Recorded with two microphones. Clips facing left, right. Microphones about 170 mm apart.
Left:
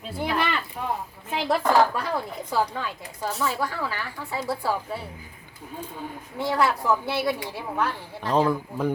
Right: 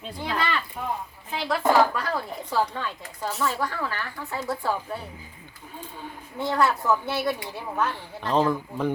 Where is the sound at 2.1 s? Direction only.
15° left (ahead or behind).